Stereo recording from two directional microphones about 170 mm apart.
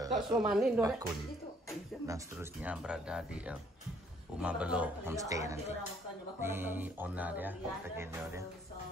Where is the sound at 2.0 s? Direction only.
15° right (ahead or behind).